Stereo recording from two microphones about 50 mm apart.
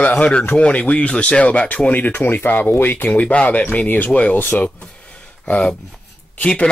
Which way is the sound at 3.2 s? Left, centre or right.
Left.